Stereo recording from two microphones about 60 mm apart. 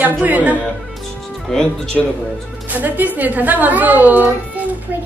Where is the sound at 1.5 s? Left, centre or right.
Centre.